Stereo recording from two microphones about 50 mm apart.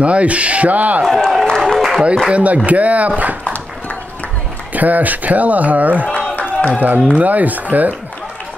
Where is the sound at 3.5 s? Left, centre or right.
Left.